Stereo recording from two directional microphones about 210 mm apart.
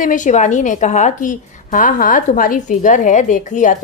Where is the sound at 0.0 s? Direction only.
35° left (ahead or behind).